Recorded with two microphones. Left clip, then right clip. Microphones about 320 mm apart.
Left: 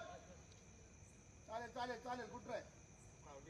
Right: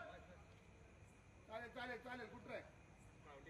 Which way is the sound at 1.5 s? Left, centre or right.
Left.